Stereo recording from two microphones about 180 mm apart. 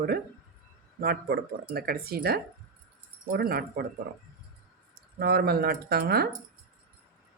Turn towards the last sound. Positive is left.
turn(degrees=-60)  # may be behind; listen again after turning